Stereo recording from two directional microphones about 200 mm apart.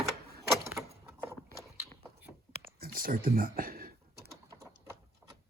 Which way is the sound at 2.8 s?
45° right (ahead or behind).